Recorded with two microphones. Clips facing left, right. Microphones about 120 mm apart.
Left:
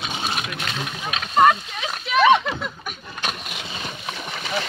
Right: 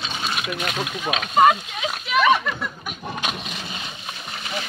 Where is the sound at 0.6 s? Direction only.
5° right (ahead or behind).